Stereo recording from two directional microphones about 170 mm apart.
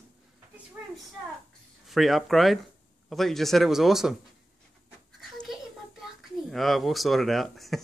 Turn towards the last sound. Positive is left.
turn(degrees=0)  # may be behind; listen again after turning